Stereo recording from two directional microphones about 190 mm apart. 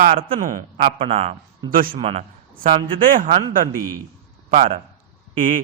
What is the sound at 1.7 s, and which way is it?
Speech, 50° right (ahead or behind).